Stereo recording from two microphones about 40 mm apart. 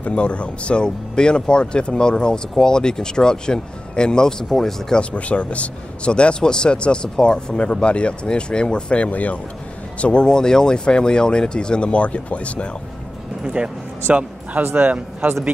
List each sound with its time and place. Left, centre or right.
0.0 s speech: left; by 4.9 s centre
5.1 s speech: left
10.2 s speech: centre
13.6 s speech: right
14.8 s a man's voice: right